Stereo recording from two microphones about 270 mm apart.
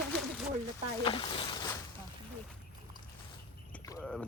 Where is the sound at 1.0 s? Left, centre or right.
Centre.